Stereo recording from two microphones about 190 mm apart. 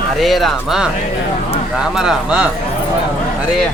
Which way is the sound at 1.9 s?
Centre (ahead or behind).